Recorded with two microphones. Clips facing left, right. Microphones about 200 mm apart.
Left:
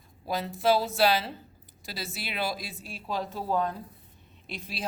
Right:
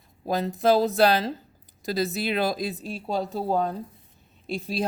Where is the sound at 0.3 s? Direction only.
40° right (ahead or behind).